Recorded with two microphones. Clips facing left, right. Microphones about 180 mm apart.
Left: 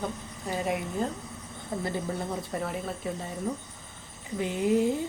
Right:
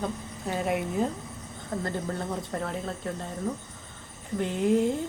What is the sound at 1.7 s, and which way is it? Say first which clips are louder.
Speech: even; 10° left (ahead or behind).